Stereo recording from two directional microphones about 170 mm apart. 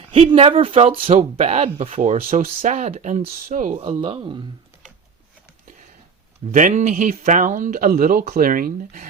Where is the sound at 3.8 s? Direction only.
35° right (ahead or behind).